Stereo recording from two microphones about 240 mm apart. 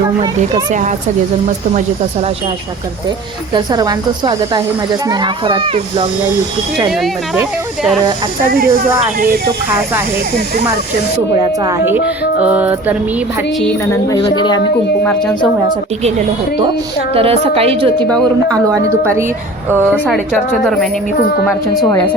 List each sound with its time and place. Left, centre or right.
0.7 s speech: right
3.5 s speech: centre
8.4 s speech: right
11.3 s a woman's voice: centre
13.6 s a woman's voice: centre
14.1 s a woman's voice: centre
17.2 s speech: right
18.7 s a woman's voice: centre
20.1 s a woman's voice: centre
21.8 s a woman's voice: centre